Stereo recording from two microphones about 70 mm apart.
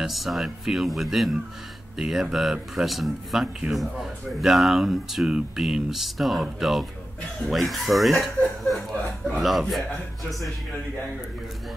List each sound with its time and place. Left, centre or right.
0.0 s speech: centre